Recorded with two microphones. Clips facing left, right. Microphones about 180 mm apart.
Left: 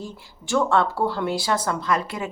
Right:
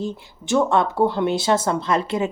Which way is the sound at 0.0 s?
20° right (ahead or behind).